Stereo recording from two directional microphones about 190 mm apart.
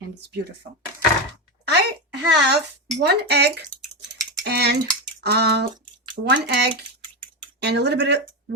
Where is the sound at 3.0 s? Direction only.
60° right (ahead or behind).